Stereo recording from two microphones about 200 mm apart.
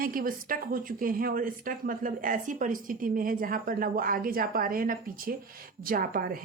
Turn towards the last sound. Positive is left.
turn(degrees=-45)  # may be behind; listen again after turning